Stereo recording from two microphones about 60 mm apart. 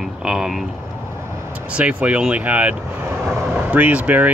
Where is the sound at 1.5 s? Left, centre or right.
Right.